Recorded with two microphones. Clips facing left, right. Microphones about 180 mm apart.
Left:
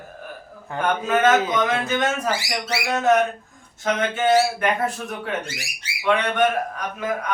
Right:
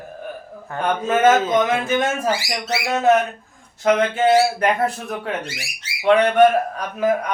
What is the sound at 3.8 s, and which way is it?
Speech, 35° right (ahead or behind).